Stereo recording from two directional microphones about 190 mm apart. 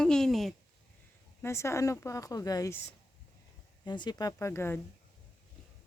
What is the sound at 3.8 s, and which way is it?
Speech, 20° left (ahead or behind).